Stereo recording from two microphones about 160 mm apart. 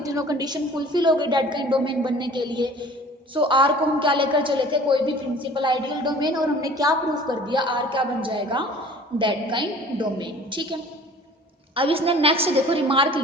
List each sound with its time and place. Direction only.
0.0 s a woman's voice: 20° right (ahead or behind)